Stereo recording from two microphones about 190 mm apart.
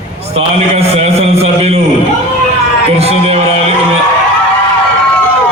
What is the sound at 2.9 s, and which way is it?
A man's voice, 30° right (ahead or behind).